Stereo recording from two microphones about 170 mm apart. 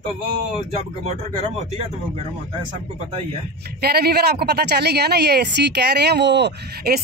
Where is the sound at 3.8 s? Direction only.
65° right (ahead or behind).